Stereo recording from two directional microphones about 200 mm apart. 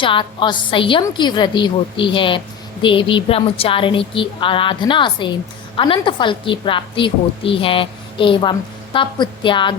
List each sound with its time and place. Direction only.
0.0 s a woman's voice: 25° left (ahead or behind)